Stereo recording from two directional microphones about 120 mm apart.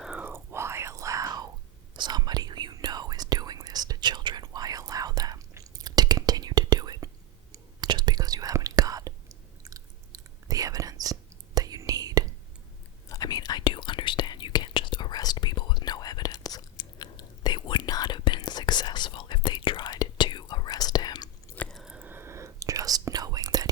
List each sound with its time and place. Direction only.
0.0 s whispering: 10° right (ahead or behind); by 12.2 s 30° right (ahead or behind)
13.1 s whispering: 30° left (ahead or behind)
21.5 s chewing: 10° left (ahead or behind)
21.8 s whispering: 10° right (ahead or behind); by 23.6 s 30° right (ahead or behind)